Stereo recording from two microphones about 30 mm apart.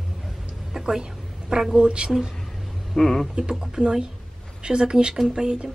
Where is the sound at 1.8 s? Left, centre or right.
Right.